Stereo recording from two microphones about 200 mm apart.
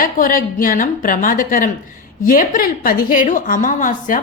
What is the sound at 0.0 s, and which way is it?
A woman's voice, 45° left (ahead or behind).